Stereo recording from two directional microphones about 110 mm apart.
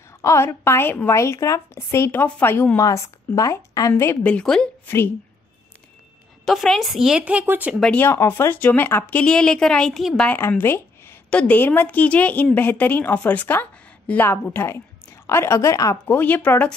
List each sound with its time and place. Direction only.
0.2 s a woman's voice: 25° left (ahead or behind)
4.3 s speech: 10° left (ahead or behind)
4.8 s a woman's voice: 20° left (ahead or behind)
6.4 s a woman's voice: centre (ahead or behind)
7.9 s speech: 20° left (ahead or behind); by 10.3 s 5° left (ahead or behind)
10.6 s a sound: 20° left (ahead or behind)
11.2 s a woman's voice: 10° left (ahead or behind); by 16.2 s 30° left (ahead or behind)
16.2 s speech: 15° left (ahead or behind)